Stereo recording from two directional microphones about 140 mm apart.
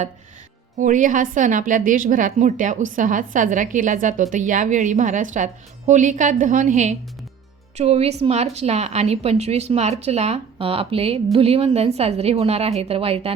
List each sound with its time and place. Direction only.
0.8 s a woman's voice: 70° right (ahead or behind)
7.8 s a woman's voice: 50° right (ahead or behind)